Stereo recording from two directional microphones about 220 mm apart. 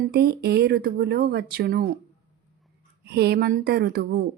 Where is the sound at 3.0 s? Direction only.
45° right (ahead or behind).